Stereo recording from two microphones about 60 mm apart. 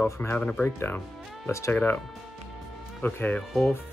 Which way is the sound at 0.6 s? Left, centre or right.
Left.